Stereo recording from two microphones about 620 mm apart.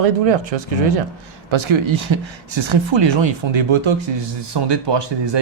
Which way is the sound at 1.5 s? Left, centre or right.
Right.